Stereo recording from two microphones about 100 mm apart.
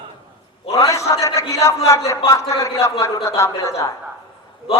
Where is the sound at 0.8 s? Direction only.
30° left (ahead or behind).